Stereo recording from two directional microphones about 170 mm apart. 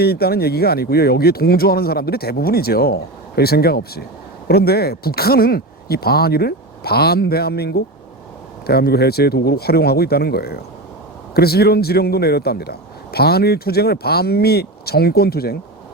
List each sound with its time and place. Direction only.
0.0 s a man's voice: 65° left (ahead or behind)